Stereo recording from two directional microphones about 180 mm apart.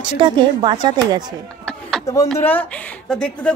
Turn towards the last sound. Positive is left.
turn(degrees=5)  # may be behind; listen again after turning